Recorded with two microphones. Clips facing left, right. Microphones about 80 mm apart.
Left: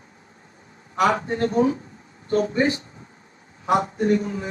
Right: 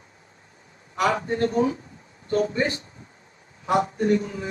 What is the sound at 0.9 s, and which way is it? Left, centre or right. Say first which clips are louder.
A man's voice: left 2 dB; left.